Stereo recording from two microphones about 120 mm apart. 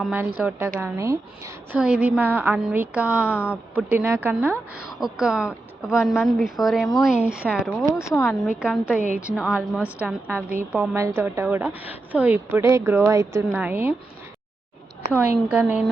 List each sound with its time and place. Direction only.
0.1 s a woman's voice: 15° right (ahead or behind)
1.8 s a woman's voice: 10° right (ahead or behind)
4.9 s a woman's voice: 5° right (ahead or behind)
15.1 s a woman's voice: 15° right (ahead or behind)